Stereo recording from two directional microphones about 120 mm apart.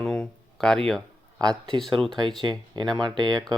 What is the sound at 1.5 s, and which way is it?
Speech, 40° right (ahead or behind).